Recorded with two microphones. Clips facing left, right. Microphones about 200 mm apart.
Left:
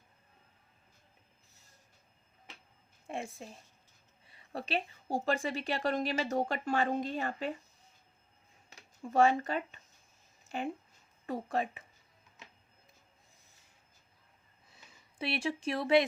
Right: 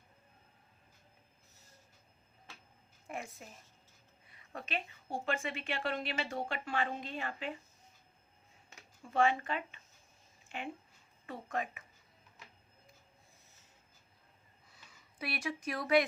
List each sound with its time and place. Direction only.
3.1 s a woman's voice: 25° left (ahead or behind)
8.7 s a woman's voice: 40° left (ahead or behind)
12.4 s printer: 25° left (ahead or behind)
15.2 s speech: 30° left (ahead or behind)